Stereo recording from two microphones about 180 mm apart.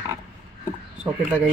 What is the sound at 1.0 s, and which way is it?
Speech, 5° right (ahead or behind).